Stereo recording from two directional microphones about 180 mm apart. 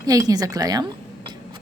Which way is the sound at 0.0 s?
20° right (ahead or behind).